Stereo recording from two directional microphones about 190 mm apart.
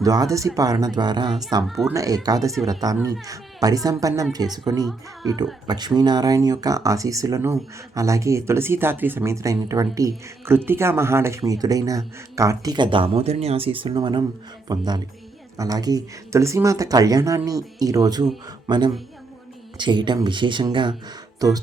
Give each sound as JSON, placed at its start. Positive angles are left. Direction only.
{"t": 0.0, "sound": "speech", "side_deg": -20}